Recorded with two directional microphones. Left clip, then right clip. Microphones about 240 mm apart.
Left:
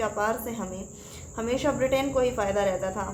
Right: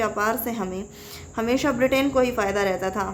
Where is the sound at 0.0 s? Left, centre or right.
Right.